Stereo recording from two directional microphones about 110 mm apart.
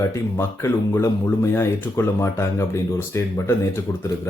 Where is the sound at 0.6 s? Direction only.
25° left (ahead or behind).